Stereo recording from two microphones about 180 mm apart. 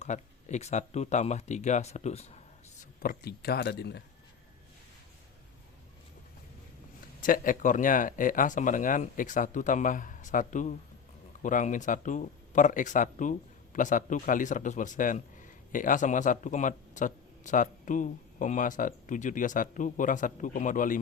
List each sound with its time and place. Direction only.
0.0 s speech: 40° left (ahead or behind)
3.0 s speech: 55° left (ahead or behind)
7.2 s a man's voice: 50° left (ahead or behind)